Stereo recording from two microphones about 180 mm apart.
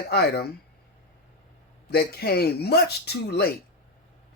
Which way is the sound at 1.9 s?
60° left (ahead or behind).